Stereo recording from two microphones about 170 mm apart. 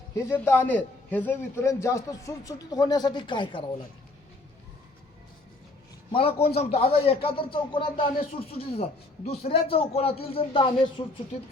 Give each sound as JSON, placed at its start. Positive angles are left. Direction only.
{"t": 0.3, "sound": "a man's voice", "side_deg": 15}
{"t": 6.1, "sound": "a man's voice", "side_deg": 30}